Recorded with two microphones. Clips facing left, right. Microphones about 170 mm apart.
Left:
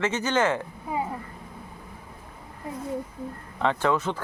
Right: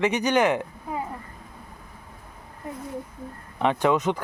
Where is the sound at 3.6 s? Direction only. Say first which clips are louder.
Right 2 dB; 15° right (ahead or behind).